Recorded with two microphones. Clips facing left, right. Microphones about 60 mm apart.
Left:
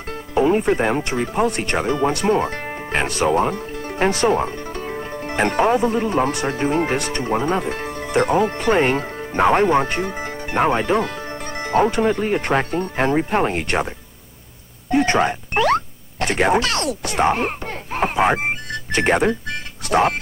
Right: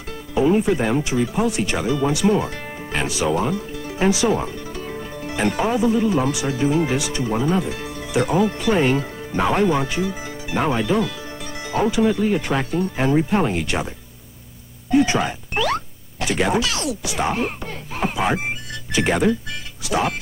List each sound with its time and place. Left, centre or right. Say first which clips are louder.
0.6 s speech: left 1 dB; left
13.1 s speech: right 1 dB; left
13.5 s speech: left 2 dB; left
14.9 s a sound: left 1 dB; left
19.9 s speech: left 4 dB; left